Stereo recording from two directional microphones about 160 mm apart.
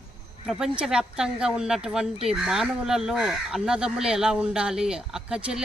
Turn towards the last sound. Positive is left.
turn(degrees=-5)  # may be behind; listen again after turning